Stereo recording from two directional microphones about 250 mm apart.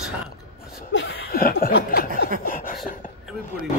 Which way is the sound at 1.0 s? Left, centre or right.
Left.